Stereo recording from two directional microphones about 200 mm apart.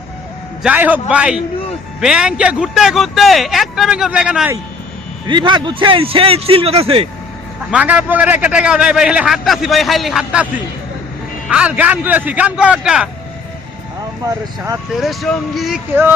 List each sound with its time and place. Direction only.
0.6 s a man's voice: 10° right (ahead or behind)
5.3 s a man's voice: 20° right (ahead or behind)
7.7 s a man's voice: 5° right (ahead or behind)
15.0 s a man's voice: centre (ahead or behind)